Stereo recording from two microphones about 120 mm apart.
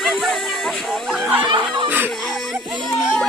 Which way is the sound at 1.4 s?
45° right (ahead or behind).